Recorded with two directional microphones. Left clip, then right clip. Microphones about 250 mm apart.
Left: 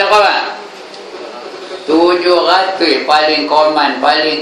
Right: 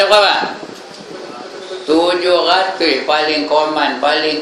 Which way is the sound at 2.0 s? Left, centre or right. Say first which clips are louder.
Left 4 dB; right.